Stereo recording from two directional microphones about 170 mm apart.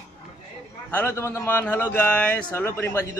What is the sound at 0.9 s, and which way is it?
A man's voice, 15° left (ahead or behind).